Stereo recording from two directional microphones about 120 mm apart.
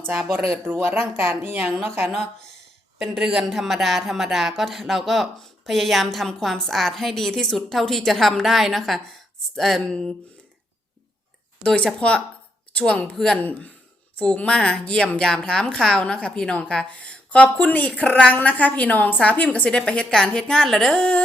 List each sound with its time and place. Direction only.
0.3 s speech: 20° right (ahead or behind)
3.0 s a woman's voice: 5° right (ahead or behind)
11.6 s a woman's voice: 10° left (ahead or behind)